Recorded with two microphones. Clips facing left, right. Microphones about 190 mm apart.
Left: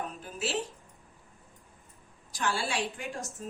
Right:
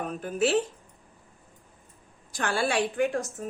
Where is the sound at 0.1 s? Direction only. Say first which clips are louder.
Right 10 dB; 60° right (ahead or behind).